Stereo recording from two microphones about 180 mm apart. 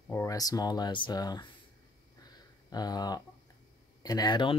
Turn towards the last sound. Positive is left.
turn(degrees=25)  # may be behind; listen again after turning